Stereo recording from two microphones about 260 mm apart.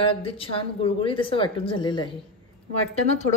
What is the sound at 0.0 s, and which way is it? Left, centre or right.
A woman's voice, left.